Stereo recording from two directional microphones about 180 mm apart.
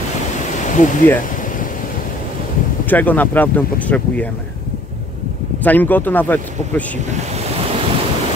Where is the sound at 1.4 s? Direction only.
50° left (ahead or behind).